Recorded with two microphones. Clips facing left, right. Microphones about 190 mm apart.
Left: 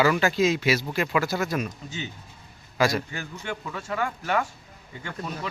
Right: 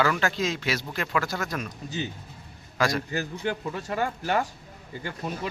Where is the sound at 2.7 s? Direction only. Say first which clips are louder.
Left 2 dB; 5° left (ahead or behind).